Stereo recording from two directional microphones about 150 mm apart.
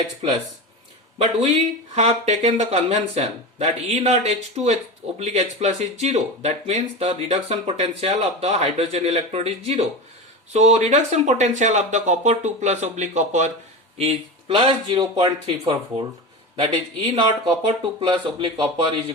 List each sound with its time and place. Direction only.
1.2 s speech: 45° right (ahead or behind)
14.0 s speech: 40° right (ahead or behind)